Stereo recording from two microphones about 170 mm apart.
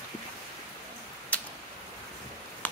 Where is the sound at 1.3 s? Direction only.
10° left (ahead or behind).